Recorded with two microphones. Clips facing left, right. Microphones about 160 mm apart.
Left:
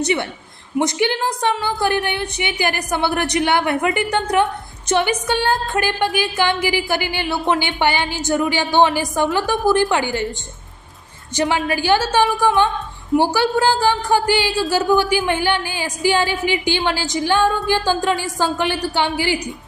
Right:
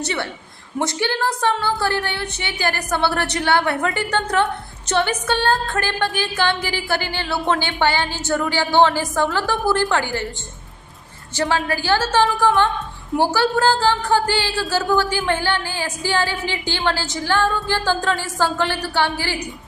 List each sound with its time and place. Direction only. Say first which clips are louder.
0.0 s speech: left 5 dB; 15° left (ahead or behind)
11.3 s speech: left 2 dB; 20° left (ahead or behind)